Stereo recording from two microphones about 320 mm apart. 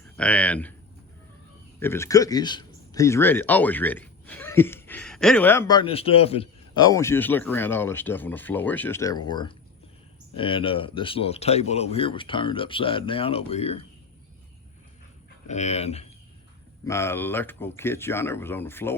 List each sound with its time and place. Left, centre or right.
0.2 s speech: centre
1.8 s speech: centre
15.4 s speech: left
16.8 s speech: centre